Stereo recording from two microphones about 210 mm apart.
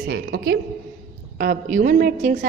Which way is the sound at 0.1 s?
50° right (ahead or behind).